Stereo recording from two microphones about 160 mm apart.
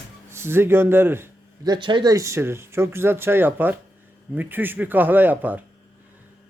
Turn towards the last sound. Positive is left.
turn(degrees=-10)  # may be behind; listen again after turning